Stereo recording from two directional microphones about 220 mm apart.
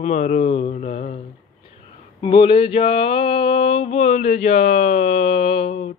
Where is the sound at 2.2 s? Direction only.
25° left (ahead or behind).